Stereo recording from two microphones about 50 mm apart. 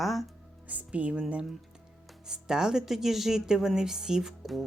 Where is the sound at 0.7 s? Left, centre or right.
Right.